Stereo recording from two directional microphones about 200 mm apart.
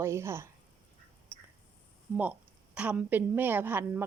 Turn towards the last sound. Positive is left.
turn(degrees=-10)  # may be behind; listen again after turning